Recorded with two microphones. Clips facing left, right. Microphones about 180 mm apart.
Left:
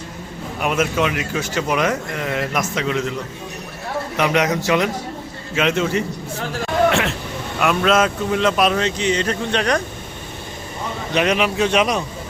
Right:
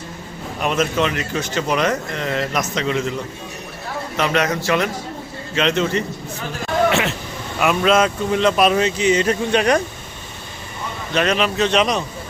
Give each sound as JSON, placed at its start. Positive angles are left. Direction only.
{"t": 0.6, "sound": "speech", "side_deg": 10}
{"t": 4.2, "sound": "a man's voice", "side_deg": 15}
{"t": 11.1, "sound": "speech", "side_deg": 15}